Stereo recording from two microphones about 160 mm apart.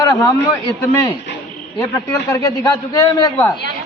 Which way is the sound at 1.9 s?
20° left (ahead or behind).